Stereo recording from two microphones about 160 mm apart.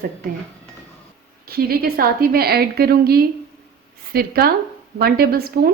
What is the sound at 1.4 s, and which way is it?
A woman's voice, 70° right (ahead or behind).